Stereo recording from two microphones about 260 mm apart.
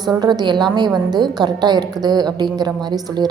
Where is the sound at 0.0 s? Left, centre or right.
Centre.